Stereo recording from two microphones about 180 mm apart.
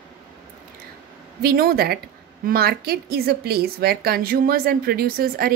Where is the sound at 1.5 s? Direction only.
55° right (ahead or behind).